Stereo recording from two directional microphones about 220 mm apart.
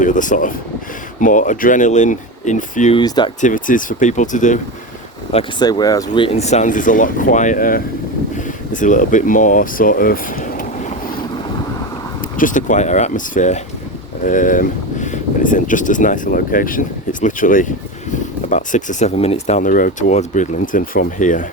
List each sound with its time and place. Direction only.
0.0 s speech: 35° left (ahead or behind)
3.0 s speech: 20° left (ahead or behind)
3.4 s speech: 35° left (ahead or behind)
5.3 s speech: 20° left (ahead or behind); by 10.7 s 40° left (ahead or behind)
12.4 s speech: 35° left (ahead or behind)